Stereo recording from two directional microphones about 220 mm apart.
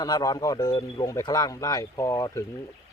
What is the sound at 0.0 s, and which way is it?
Speech, 20° left (ahead or behind).